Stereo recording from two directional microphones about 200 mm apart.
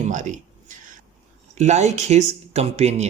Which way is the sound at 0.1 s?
40° right (ahead or behind).